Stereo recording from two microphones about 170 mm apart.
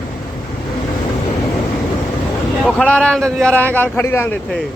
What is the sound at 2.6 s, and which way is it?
Speech, 5° left (ahead or behind).